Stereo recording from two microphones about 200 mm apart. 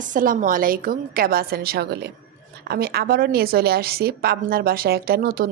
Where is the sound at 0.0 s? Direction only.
40° right (ahead or behind).